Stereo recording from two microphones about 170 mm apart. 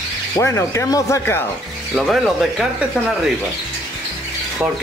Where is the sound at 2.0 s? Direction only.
Centre (ahead or behind).